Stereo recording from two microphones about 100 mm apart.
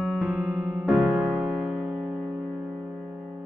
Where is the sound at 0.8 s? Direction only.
5° right (ahead or behind).